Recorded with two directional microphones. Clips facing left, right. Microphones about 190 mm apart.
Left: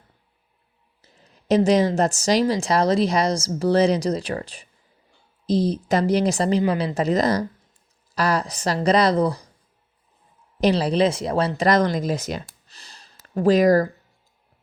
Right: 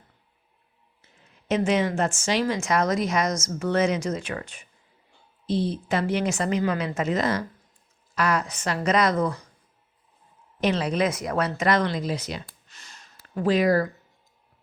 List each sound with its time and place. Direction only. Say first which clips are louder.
1.0 s a sound: left 5 dB; 35° left (ahead or behind)
2.0 s speech: left 5 dB; 40° left (ahead or behind)
10.6 s speech: left 5 dB; 35° left (ahead or behind)